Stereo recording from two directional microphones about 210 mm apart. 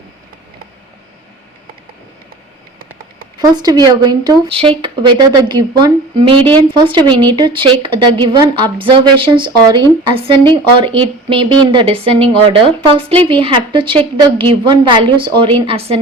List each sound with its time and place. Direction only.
3.4 s speech: 20° right (ahead or behind)